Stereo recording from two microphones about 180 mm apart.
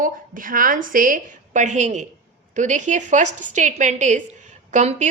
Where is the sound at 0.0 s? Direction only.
50° right (ahead or behind).